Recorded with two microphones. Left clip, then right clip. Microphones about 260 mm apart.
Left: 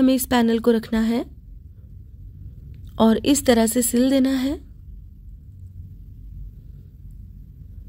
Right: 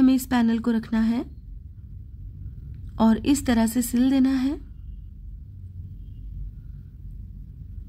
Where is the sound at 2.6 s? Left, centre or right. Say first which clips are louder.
Left 4 dB; centre.